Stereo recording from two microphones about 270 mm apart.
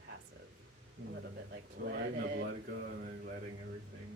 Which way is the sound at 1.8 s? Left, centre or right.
Right.